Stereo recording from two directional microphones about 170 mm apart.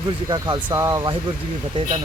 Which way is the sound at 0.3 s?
25° right (ahead or behind).